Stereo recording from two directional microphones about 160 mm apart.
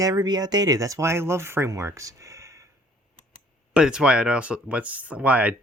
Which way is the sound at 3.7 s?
5° right (ahead or behind).